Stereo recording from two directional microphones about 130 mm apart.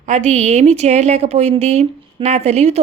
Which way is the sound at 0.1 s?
65° right (ahead or behind).